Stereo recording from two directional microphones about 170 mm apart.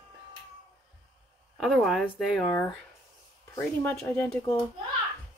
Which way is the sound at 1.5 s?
Centre (ahead or behind).